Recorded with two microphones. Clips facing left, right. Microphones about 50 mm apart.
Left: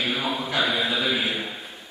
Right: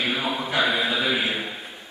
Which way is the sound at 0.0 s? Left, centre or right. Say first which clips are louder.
Right 1 dB; centre.